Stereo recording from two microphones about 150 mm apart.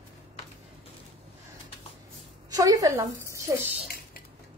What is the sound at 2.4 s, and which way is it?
A woman's voice, 25° right (ahead or behind).